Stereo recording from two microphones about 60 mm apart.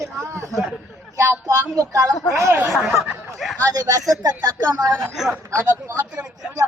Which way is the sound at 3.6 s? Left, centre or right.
Right.